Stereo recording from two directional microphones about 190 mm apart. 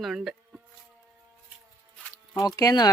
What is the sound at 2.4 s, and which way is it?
Speech, 20° left (ahead or behind).